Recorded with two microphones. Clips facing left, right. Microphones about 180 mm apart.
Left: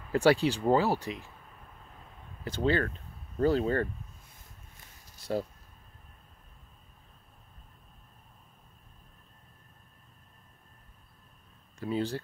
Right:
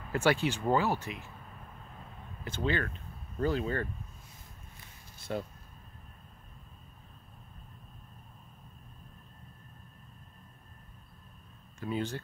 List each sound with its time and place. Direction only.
0.1 s speech: 35° left (ahead or behind)
2.4 s speech: 35° left (ahead or behind)
4.7 s a sound: 35° left (ahead or behind)
11.8 s speech: 35° left (ahead or behind)